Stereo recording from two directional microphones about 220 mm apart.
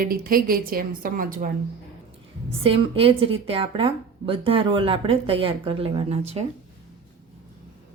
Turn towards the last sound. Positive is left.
turn(degrees=-30)  # may be behind; listen again after turning